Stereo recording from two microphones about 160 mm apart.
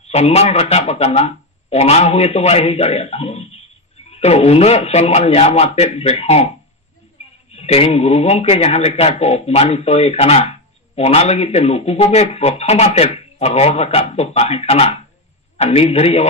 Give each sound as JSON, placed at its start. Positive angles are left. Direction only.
{"t": 0.1, "sound": "a man's voice", "side_deg": 40}
{"t": 7.2, "sound": "a sound", "side_deg": 40}
{"t": 7.5, "sound": "a man's voice", "side_deg": 40}